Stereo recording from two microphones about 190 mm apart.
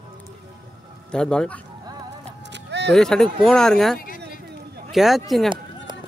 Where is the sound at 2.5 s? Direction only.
65° right (ahead or behind).